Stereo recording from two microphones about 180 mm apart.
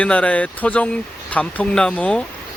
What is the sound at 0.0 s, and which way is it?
Speech, 5° left (ahead or behind).